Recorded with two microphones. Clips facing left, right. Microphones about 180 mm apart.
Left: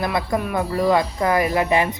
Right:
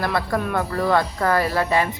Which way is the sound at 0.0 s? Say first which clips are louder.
Left 1 dB; 15° left (ahead or behind).